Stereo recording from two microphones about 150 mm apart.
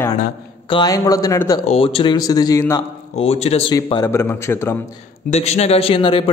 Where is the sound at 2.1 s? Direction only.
25° left (ahead or behind).